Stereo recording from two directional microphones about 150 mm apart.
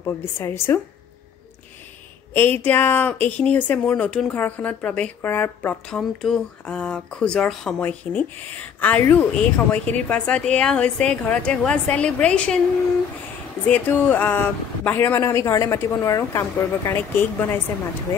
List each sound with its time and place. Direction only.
0.0 s speech: 15° left (ahead or behind)
2.3 s speech: 10° left (ahead or behind)
13.7 s speech: 10° left (ahead or behind)